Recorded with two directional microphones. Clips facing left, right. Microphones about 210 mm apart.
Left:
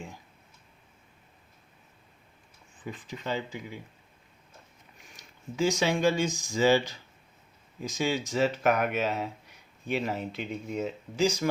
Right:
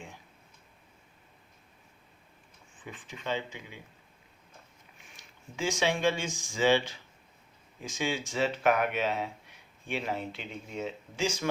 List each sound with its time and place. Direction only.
2.8 s speech: 40° left (ahead or behind)
5.1 s speech: 40° left (ahead or behind)